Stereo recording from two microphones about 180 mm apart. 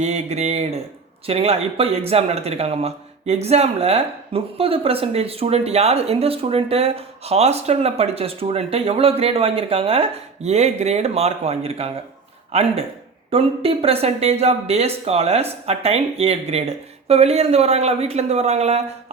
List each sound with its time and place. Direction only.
0.0 s speech: 40° right (ahead or behind)